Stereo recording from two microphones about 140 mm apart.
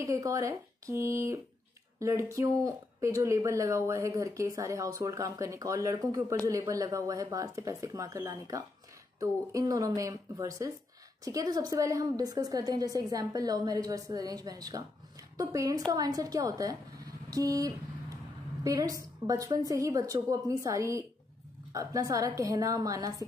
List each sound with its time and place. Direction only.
0.0 s a woman's voice: 25° right (ahead or behind)